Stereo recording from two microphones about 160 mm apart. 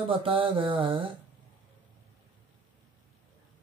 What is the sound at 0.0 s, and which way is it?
Speech, 35° right (ahead or behind).